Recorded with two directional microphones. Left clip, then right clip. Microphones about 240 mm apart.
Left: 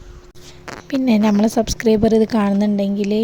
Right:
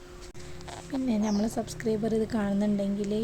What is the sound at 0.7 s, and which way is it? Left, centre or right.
A woman's voice, left.